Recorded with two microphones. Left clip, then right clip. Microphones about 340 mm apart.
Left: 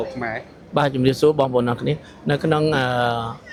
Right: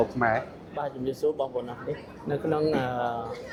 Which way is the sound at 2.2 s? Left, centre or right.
Left.